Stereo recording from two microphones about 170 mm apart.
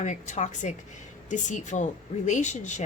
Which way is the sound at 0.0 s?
45° left (ahead or behind).